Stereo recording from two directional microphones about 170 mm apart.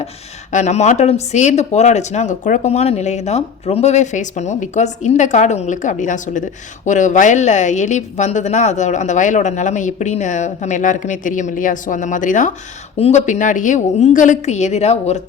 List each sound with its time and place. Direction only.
0.5 s speech: 45° left (ahead or behind)